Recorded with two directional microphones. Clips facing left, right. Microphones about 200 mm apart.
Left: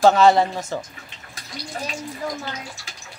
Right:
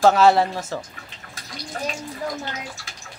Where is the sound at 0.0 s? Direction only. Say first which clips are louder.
Left 1 dB; 5° right (ahead or behind).